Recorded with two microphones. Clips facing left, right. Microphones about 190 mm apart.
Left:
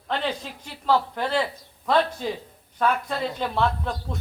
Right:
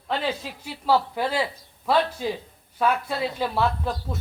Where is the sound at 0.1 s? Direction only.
5° right (ahead or behind).